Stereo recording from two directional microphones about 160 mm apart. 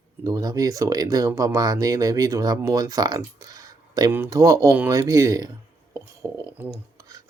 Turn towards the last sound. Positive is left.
turn(degrees=-20)  # may be behind; listen again after turning